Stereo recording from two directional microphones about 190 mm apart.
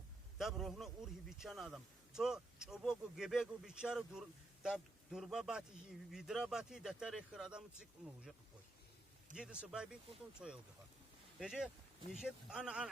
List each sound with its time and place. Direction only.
0.3 s a man's voice: centre (ahead or behind)
9.3 s a man's voice: 5° right (ahead or behind)